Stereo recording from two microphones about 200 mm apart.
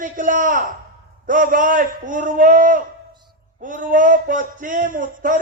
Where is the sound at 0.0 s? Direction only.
40° right (ahead or behind).